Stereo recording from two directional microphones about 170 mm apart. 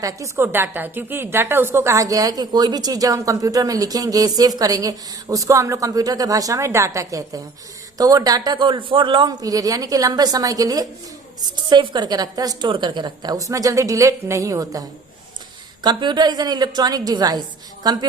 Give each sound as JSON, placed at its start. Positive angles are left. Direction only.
{"t": 0.0, "sound": "a woman's voice", "side_deg": -15}